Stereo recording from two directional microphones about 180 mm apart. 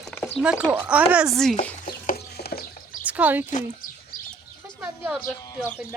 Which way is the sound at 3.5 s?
40° left (ahead or behind).